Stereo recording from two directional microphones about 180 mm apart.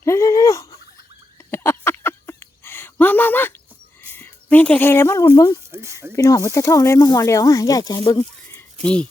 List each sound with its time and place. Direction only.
0.0 s a sound: 15° left (ahead or behind)
4.1 s speech: 10° left (ahead or behind)
5.7 s speech: 15° right (ahead or behind)
6.1 s speech: 20° left (ahead or behind)